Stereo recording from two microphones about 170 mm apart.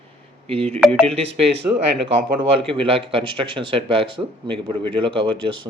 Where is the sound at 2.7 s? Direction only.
30° right (ahead or behind).